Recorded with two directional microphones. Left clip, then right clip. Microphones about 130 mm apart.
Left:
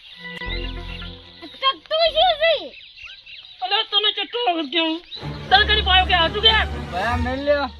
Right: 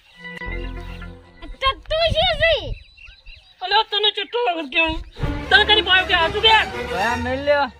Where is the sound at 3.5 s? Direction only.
55° right (ahead or behind).